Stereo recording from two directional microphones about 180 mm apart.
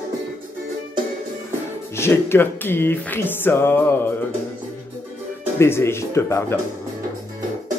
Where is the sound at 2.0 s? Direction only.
15° left (ahead or behind).